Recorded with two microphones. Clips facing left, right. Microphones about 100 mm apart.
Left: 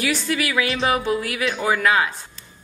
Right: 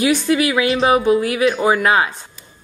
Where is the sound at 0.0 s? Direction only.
20° right (ahead or behind).